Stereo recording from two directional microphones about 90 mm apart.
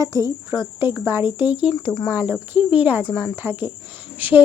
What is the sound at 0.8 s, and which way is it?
Speech, 25° right (ahead or behind).